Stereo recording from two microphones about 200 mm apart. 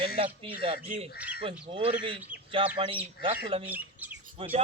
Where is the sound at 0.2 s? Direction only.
30° right (ahead or behind).